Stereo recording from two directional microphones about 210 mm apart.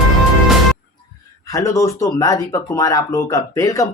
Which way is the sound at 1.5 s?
15° left (ahead or behind).